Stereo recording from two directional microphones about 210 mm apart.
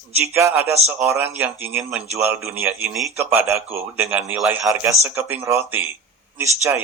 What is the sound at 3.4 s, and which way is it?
A man's voice, 10° right (ahead or behind).